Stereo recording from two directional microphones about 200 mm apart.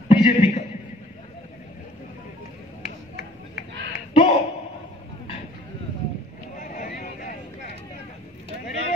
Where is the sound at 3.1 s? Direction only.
45° left (ahead or behind).